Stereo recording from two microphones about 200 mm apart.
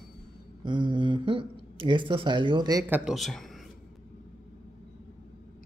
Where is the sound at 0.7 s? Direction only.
25° right (ahead or behind).